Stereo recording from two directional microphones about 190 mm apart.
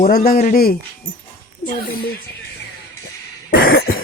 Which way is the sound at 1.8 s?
50° left (ahead or behind).